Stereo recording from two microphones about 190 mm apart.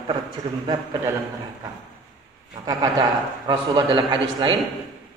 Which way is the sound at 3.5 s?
20° right (ahead or behind).